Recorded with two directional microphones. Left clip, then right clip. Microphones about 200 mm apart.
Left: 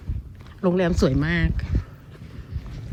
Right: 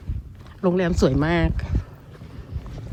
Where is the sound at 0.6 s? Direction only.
Centre (ahead or behind).